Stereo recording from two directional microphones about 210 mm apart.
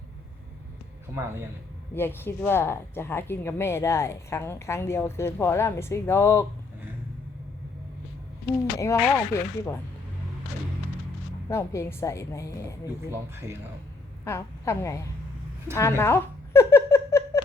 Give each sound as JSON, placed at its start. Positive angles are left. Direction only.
{"t": 2.0, "sound": "speech", "side_deg": 10}
{"t": 8.8, "sound": "speech", "side_deg": 15}
{"t": 11.4, "sound": "speech", "side_deg": 15}
{"t": 14.3, "sound": "speech", "side_deg": 15}
{"t": 15.8, "sound": "a sound", "side_deg": 10}